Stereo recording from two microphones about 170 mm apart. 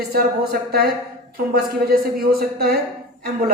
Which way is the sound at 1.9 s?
65° right (ahead or behind).